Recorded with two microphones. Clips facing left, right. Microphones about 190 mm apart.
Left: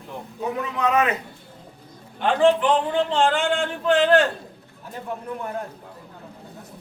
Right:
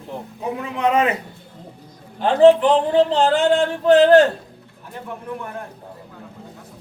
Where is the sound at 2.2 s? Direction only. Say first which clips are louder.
Right 6 dB; 40° right (ahead or behind).